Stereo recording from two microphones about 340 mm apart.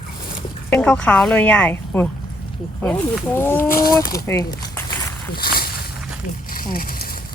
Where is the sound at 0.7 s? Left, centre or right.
Centre.